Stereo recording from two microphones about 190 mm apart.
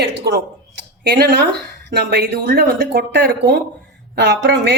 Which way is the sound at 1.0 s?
60° right (ahead or behind).